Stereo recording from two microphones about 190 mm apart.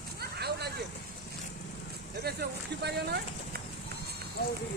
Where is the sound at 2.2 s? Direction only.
60° right (ahead or behind).